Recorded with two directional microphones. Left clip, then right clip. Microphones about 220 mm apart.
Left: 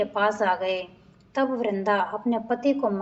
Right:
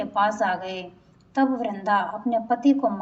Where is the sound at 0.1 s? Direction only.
40° left (ahead or behind).